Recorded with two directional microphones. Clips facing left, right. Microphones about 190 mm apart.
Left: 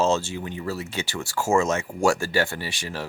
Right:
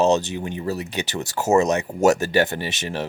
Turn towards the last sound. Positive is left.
turn(degrees=-20)  # may be behind; listen again after turning